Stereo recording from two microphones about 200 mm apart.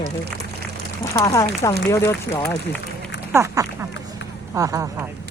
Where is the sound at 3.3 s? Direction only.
15° right (ahead or behind).